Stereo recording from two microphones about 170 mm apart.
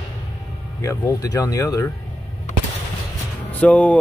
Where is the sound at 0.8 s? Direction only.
15° left (ahead or behind).